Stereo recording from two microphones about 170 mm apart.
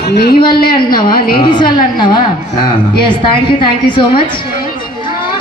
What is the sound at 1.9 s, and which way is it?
A woman's voice, 25° left (ahead or behind).